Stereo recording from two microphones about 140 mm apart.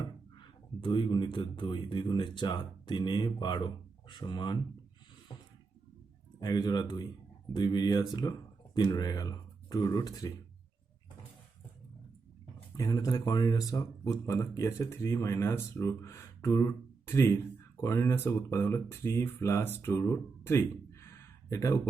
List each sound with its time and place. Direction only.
0.0 s speech: 35° left (ahead or behind)
6.4 s speech: 30° left (ahead or behind)
12.7 s speech: 25° left (ahead or behind)